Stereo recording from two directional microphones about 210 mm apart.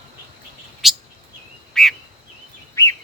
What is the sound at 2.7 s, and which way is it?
Bird vocalization, 15° left (ahead or behind).